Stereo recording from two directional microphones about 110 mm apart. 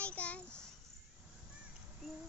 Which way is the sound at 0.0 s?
10° left (ahead or behind).